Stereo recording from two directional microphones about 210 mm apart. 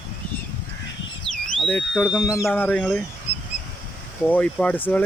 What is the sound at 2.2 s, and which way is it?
Speech, 15° left (ahead or behind).